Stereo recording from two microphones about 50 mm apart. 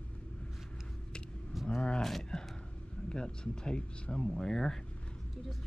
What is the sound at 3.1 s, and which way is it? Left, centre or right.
Speech, centre.